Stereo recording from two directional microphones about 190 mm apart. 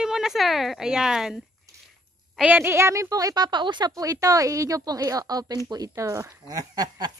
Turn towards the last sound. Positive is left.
turn(degrees=-20)  # may be behind; listen again after turning